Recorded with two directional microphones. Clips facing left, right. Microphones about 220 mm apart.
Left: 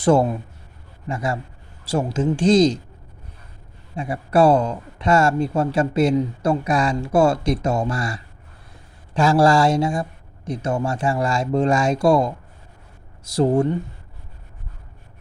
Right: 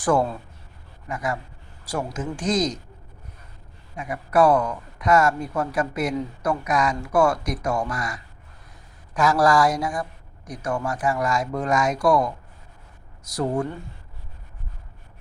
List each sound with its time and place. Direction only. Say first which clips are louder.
0.0 s speech: left 5 dB; 25° left (ahead or behind)
3.9 s speech: left 3 dB; 30° left (ahead or behind)
13.3 s speech: left 7 dB; 25° left (ahead or behind)